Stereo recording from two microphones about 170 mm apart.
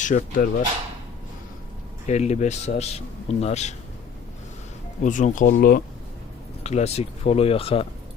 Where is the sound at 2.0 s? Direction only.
40° left (ahead or behind).